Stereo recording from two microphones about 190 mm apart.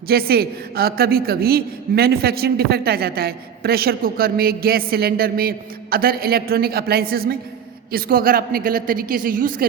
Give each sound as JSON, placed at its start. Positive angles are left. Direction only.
{"t": 0.1, "sound": "a woman's voice", "side_deg": -55}